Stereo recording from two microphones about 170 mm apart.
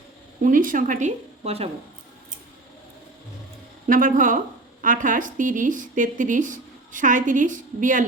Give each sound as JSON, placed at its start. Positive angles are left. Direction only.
{"t": 0.4, "sound": "a woman's voice", "side_deg": -55}
{"t": 3.8, "sound": "a woman's voice", "side_deg": -55}